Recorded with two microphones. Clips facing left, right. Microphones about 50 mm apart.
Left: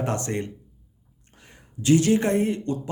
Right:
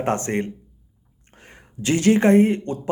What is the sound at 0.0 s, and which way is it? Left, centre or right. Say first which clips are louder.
Speech: right 4 dB; right.